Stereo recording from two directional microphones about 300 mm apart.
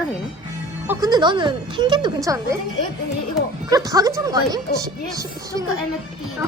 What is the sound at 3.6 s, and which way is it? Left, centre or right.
Speech, centre.